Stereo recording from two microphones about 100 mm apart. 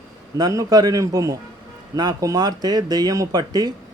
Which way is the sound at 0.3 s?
40° right (ahead or behind).